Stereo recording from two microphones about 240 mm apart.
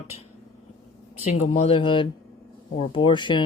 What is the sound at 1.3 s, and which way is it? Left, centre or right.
A woman's voice, left.